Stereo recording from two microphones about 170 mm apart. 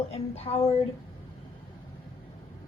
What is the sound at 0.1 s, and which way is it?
Speech, 35° left (ahead or behind).